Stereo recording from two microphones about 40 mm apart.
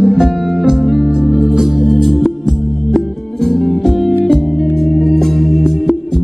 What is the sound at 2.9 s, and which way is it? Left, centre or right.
Music, centre.